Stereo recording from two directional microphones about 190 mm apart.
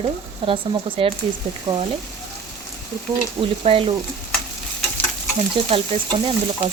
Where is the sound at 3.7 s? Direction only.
30° right (ahead or behind).